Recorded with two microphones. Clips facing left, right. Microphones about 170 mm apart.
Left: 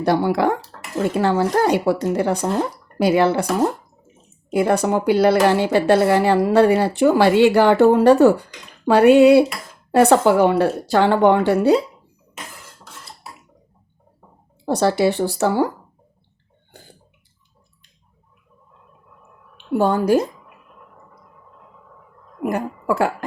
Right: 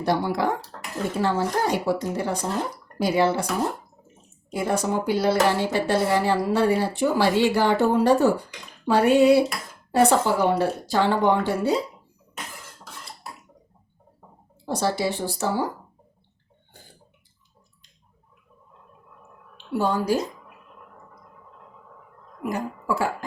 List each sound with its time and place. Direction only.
0.0 s speech: 70° left (ahead or behind)
4.5 s speech: 70° left (ahead or behind)
14.6 s speech: 70° left (ahead or behind)
19.7 s speech: 55° left (ahead or behind)
22.4 s speech: 60° left (ahead or behind)